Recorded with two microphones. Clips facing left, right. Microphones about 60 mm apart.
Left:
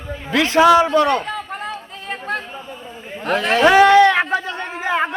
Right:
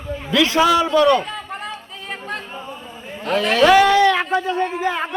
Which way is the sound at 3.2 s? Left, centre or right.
Left.